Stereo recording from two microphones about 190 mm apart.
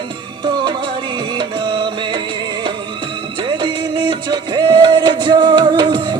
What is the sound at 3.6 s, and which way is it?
Music, 25° right (ahead or behind).